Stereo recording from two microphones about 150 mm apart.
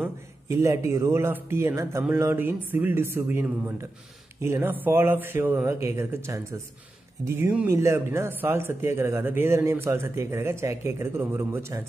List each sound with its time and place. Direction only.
0.0 s speech: 20° right (ahead or behind)